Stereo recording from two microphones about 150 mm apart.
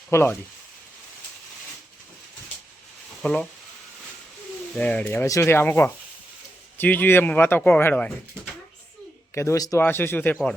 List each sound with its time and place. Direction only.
0.1 s speech: 15° left (ahead or behind)
3.2 s speech: 5° left (ahead or behind)
4.7 s speech: 10° left (ahead or behind)
9.3 s speech: 20° left (ahead or behind)